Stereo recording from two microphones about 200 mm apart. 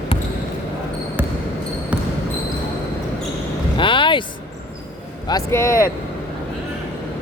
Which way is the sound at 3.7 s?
25° left (ahead or behind).